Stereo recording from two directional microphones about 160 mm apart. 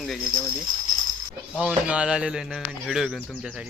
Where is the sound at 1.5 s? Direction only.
5° right (ahead or behind).